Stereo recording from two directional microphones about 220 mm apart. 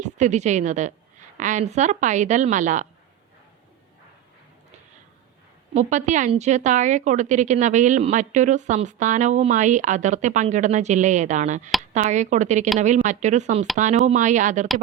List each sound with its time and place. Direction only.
0.0 s a woman's voice: 30° right (ahead or behind)
5.7 s a woman's voice: 35° right (ahead or behind)